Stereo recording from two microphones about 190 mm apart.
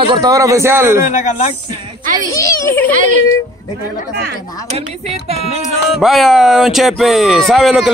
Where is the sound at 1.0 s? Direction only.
40° left (ahead or behind).